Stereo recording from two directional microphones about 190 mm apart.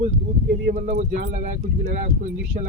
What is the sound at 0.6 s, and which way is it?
Speech, 45° right (ahead or behind).